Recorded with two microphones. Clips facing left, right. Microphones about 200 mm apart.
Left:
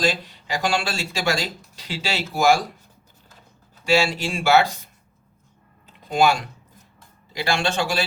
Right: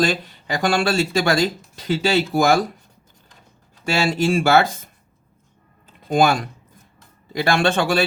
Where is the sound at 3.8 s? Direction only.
50° right (ahead or behind).